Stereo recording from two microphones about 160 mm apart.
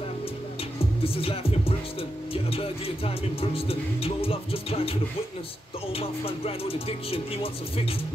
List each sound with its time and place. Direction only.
1.0 s speech: 35° left (ahead or behind)
5.9 s speech: 35° left (ahead or behind)